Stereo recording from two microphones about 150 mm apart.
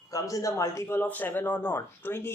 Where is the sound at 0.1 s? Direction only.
20° left (ahead or behind).